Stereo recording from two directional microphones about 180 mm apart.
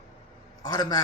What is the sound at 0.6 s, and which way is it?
Speech, 20° left (ahead or behind).